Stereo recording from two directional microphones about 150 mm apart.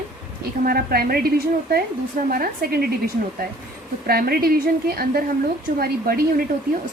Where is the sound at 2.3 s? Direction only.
80° right.